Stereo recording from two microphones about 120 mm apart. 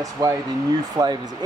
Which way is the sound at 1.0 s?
25° right (ahead or behind).